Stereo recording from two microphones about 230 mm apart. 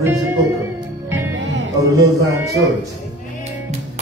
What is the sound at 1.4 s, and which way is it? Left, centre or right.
Music, right.